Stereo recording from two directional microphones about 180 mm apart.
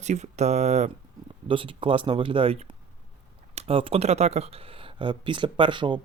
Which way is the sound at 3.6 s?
30° right (ahead or behind).